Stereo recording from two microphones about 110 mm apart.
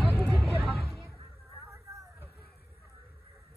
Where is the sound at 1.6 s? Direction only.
25° right (ahead or behind).